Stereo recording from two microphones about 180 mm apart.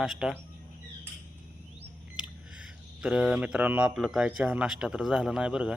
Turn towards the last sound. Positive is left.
turn(degrees=-5)  # may be behind; listen again after turning